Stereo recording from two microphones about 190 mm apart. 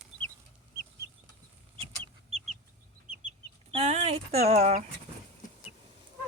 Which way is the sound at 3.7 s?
30° right (ahead or behind).